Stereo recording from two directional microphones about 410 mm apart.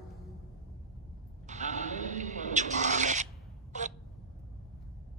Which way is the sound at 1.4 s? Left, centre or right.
Centre.